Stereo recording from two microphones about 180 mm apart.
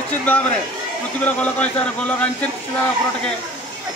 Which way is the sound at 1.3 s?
5° left (ahead or behind).